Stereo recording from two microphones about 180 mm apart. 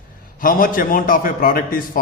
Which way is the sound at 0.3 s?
50° left (ahead or behind).